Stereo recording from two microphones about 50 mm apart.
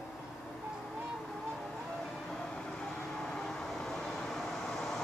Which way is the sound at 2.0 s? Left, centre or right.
Centre.